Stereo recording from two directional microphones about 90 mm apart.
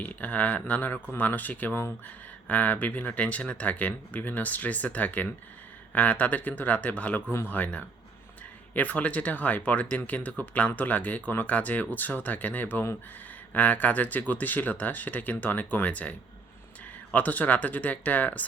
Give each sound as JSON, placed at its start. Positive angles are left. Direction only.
{"t": 0.0, "sound": "speech", "side_deg": 15}